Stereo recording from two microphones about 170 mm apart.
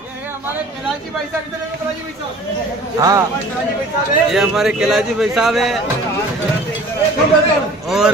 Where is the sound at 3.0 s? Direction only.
20° right (ahead or behind).